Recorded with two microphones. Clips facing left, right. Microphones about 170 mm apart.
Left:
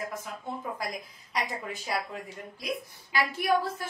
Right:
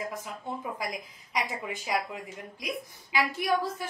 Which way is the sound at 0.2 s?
15° right (ahead or behind).